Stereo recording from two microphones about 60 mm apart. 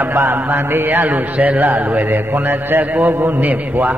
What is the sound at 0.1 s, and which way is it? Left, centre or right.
A man's voice, right.